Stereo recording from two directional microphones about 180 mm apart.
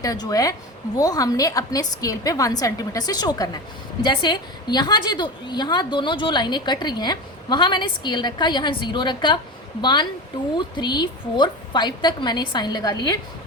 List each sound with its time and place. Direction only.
0.0 s a woman's voice: 20° left (ahead or behind)